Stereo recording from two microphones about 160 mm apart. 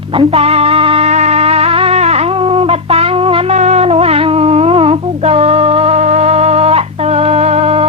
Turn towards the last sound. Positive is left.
turn(degrees=-40)  # may be behind; listen again after turning